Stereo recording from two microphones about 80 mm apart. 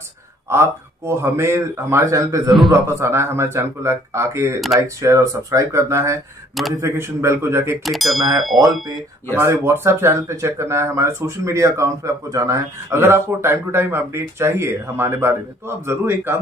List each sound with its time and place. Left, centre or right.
0.5 s speech: right
7.8 s a sound: centre
9.4 s a man's voice: right